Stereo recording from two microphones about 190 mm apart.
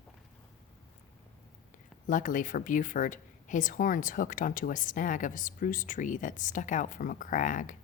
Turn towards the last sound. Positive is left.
turn(degrees=45)  # may be behind; listen again after turning